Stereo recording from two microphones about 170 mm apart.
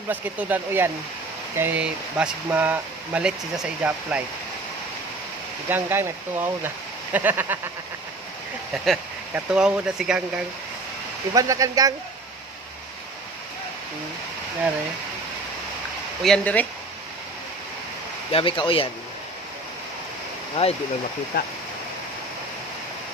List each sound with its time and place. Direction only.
0.1 s speech: 10° right (ahead or behind)
5.7 s speech: 15° right (ahead or behind)
8.8 s speech: 5° right (ahead or behind)
11.3 s speech: 20° right (ahead or behind)
16.2 s speech: 5° left (ahead or behind)
18.3 s speech: 30° left (ahead or behind)
20.6 s speech: 35° left (ahead or behind)